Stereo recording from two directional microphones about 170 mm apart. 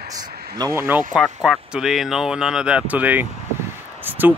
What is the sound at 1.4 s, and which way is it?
Speech, 5° right (ahead or behind).